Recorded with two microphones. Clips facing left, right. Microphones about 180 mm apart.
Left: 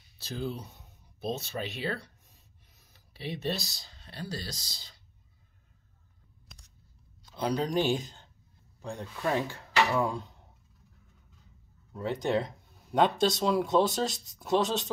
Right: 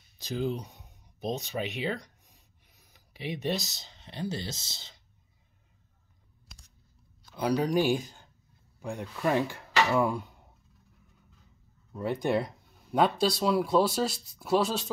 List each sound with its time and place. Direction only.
0.2 s speech: 15° right (ahead or behind)
7.3 s speech: 10° right (ahead or behind)
11.9 s speech: 10° right (ahead or behind)